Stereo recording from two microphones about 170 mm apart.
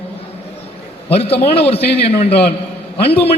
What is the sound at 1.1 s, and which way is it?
A man's voice, 35° left (ahead or behind).